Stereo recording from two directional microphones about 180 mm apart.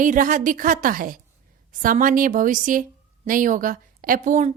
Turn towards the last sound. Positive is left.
turn(degrees=-40)  # may be behind; listen again after turning